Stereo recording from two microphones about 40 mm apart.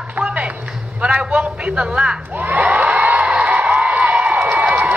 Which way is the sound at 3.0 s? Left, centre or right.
Right.